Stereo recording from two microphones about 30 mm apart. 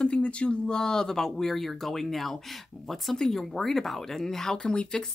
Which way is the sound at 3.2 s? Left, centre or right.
Centre.